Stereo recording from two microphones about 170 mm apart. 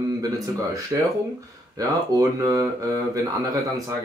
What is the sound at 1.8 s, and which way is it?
Speech, 20° right (ahead or behind).